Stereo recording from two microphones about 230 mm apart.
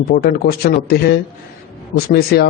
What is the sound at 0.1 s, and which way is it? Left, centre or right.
A man's voice, left.